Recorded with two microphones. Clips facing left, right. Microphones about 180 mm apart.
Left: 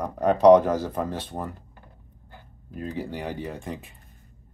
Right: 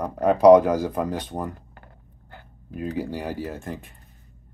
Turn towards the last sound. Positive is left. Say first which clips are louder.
# right 1 dB
turn(degrees=0)  # may be behind; listen again after turning